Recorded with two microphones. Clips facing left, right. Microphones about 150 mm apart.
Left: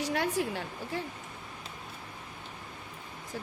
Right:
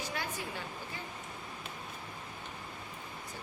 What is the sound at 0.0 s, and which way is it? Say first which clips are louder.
A woman's voice: left 9 dB; 75° left (ahead or behind).